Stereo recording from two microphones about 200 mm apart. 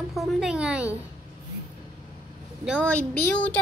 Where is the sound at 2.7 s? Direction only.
5° left (ahead or behind).